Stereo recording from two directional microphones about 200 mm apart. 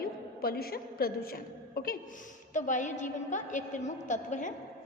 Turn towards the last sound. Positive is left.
turn(degrees=40)  # may be behind; listen again after turning